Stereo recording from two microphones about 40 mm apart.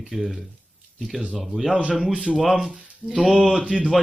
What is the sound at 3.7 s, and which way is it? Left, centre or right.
Speech, right.